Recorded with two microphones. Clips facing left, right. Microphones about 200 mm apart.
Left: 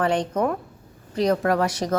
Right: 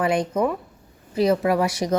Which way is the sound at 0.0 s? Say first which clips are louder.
Right 1 dB; 10° right (ahead or behind).